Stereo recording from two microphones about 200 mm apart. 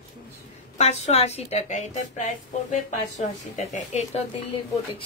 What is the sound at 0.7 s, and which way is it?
A woman's voice, 30° left (ahead or behind).